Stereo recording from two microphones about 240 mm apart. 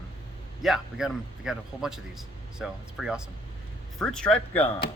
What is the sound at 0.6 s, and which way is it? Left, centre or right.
A man's voice, centre.